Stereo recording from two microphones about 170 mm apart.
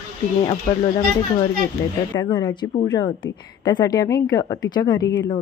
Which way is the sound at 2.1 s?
25° left (ahead or behind).